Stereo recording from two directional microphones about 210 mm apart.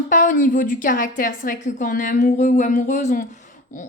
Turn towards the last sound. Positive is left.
turn(degrees=35)  # may be behind; listen again after turning